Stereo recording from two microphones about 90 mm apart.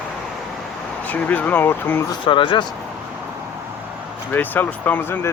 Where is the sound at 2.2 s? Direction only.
65° left (ahead or behind).